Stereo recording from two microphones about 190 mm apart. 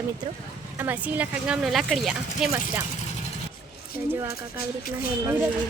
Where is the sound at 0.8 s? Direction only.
10° right (ahead or behind).